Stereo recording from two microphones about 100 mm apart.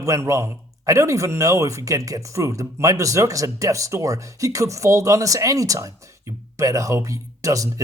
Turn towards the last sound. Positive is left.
turn(degrees=-35)  # may be behind; listen again after turning